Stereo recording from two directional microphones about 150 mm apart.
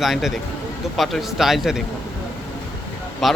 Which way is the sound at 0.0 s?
Centre (ahead or behind).